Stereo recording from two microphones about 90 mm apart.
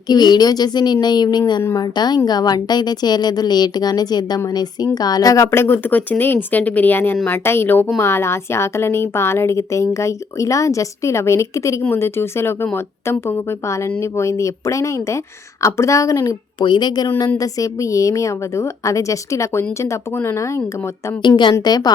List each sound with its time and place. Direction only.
0.1 s a woman's voice: 50° left (ahead or behind)
5.5 s a woman's voice: 25° left (ahead or behind)
16.6 s a woman's voice: 55° left (ahead or behind); by 20.6 s 30° left (ahead or behind)
21.2 s speech: 60° left (ahead or behind)
21.6 s a woman's voice: 50° left (ahead or behind)